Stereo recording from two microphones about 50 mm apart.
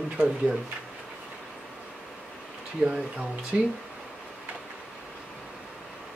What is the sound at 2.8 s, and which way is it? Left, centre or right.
Speech, centre.